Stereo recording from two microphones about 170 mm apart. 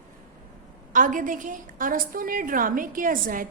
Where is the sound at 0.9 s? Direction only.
50° right (ahead or behind).